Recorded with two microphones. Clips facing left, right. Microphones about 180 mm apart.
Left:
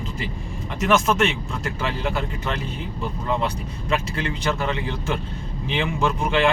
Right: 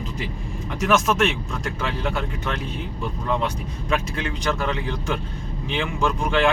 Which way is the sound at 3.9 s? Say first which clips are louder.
Even; centre (ahead or behind).